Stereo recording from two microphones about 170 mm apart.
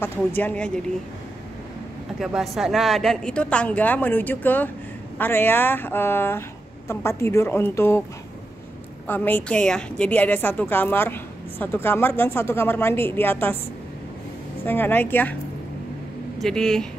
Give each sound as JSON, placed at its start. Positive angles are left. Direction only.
{"t": 0.0, "sound": "a woman's voice", "side_deg": 10}
{"t": 2.1, "sound": "a woman's voice", "side_deg": 0}
{"t": 9.0, "sound": "a woman's voice", "side_deg": 10}
{"t": 14.7, "sound": "a woman's voice", "side_deg": 10}
{"t": 16.3, "sound": "speech", "side_deg": 5}